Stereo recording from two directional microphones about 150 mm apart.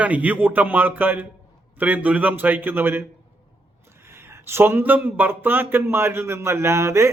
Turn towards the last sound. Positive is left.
turn(degrees=-20)  # may be behind; listen again after turning